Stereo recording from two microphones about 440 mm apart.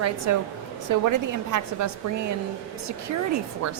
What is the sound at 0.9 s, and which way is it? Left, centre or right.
A woman's voice, right.